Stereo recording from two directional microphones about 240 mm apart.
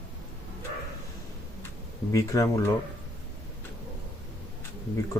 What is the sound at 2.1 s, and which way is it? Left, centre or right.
Speech, centre.